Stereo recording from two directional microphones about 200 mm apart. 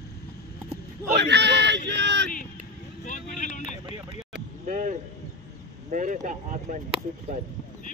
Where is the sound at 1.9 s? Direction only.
60° right (ahead or behind).